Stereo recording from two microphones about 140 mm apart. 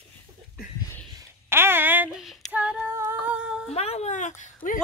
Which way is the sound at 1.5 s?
15° right (ahead or behind).